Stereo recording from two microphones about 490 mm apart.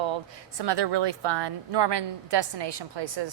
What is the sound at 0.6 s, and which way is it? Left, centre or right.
A woman's voice, right.